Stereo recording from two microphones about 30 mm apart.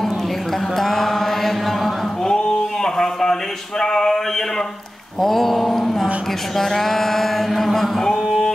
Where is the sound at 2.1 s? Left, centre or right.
Centre.